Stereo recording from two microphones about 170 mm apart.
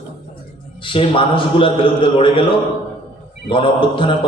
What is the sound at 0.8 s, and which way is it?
A man's voice, 30° left (ahead or behind).